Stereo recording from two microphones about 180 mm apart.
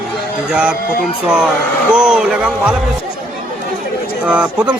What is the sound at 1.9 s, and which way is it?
Speech, 5° right (ahead or behind).